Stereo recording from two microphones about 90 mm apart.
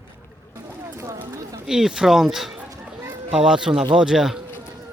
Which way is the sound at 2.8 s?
25° right (ahead or behind).